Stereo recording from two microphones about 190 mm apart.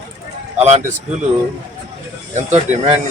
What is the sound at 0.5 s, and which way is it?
Speech, 35° right (ahead or behind).